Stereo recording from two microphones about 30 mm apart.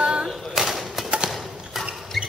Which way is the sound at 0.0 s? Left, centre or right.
Right.